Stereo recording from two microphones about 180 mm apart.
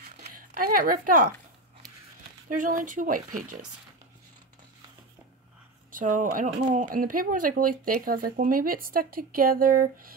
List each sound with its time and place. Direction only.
0.2 s a sound: 50° right (ahead or behind)
2.5 s speech: 45° right (ahead or behind)
5.9 s speech: 45° right (ahead or behind)